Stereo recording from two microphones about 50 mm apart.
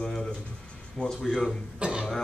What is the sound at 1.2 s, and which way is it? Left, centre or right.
Speech, centre.